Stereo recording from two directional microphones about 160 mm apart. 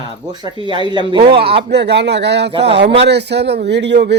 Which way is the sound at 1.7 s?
90° right.